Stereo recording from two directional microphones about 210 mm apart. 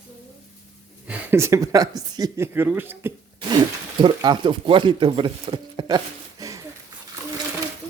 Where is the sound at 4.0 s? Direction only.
20° right (ahead or behind).